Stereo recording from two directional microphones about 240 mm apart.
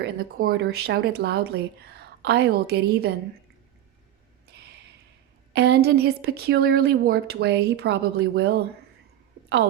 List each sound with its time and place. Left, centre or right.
0.0 s speech: right
5.5 s a woman's voice: right